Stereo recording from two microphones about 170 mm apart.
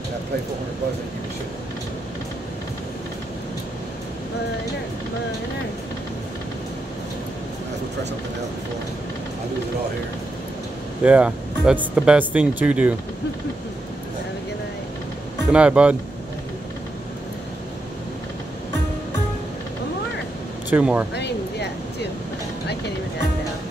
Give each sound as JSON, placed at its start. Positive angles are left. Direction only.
{"t": 11.1, "sound": "speech", "side_deg": -5}
{"t": 15.5, "sound": "speech", "side_deg": -5}
{"t": 20.7, "sound": "speech", "side_deg": -10}
{"t": 21.1, "sound": "a sound", "side_deg": 80}